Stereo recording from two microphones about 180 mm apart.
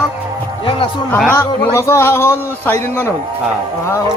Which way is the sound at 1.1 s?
10° left (ahead or behind).